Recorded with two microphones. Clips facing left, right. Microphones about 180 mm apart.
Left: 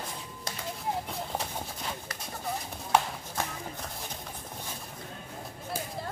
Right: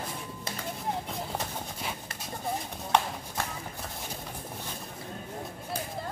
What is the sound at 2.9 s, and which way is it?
Clip-clop, 5° left (ahead or behind).